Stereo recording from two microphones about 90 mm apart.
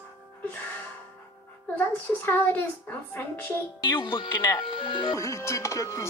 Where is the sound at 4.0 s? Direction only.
65° left (ahead or behind).